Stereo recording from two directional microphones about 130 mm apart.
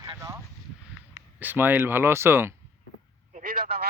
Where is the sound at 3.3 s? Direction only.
85° right.